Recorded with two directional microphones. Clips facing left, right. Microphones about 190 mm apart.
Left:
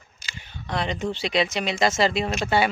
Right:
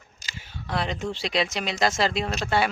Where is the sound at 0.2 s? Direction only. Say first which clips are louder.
Left 1 dB; 45° right (ahead or behind).